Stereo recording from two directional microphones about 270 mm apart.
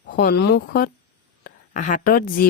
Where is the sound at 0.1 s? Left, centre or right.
Left.